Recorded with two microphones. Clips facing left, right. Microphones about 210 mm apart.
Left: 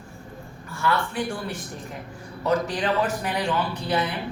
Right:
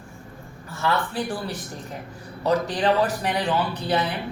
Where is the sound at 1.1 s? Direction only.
35° right (ahead or behind).